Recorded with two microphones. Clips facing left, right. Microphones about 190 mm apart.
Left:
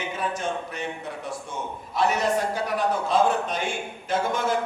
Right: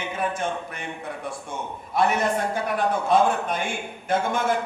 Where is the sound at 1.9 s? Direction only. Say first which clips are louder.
Right 1 dB; 55° right (ahead or behind).